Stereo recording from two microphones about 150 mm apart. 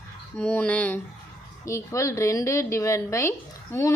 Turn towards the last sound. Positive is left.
turn(degrees=20)  # may be behind; listen again after turning